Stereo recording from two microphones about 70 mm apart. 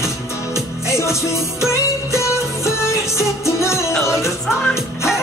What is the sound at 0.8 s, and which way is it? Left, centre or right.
Music, left.